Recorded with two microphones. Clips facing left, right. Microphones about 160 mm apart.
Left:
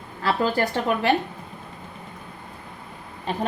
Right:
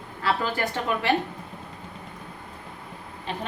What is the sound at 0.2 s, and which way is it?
Speech, 40° left (ahead or behind).